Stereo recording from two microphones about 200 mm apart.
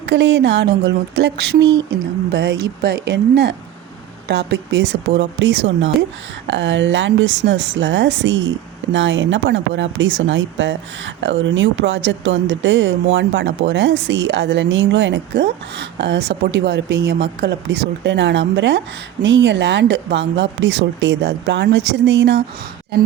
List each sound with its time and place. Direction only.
0.0 s speech: 60° right (ahead or behind)